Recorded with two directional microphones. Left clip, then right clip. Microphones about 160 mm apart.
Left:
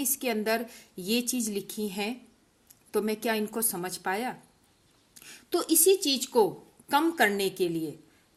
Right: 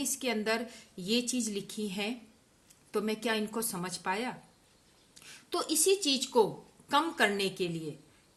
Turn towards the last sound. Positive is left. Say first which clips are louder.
# left 5 dB
turn(degrees=35)  # may be behind; listen again after turning